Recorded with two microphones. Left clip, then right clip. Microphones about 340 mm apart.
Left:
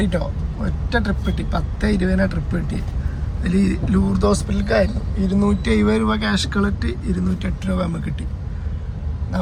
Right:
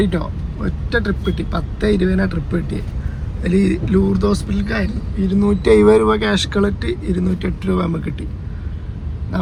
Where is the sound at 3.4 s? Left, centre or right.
Right.